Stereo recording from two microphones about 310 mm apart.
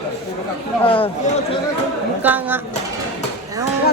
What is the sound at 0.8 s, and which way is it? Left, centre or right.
Speech, centre.